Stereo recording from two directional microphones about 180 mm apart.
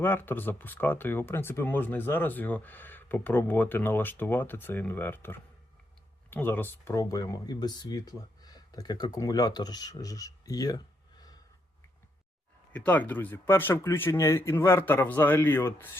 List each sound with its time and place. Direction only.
0.0 s speech: 10° left (ahead or behind)
12.7 s speech: 10° left (ahead or behind)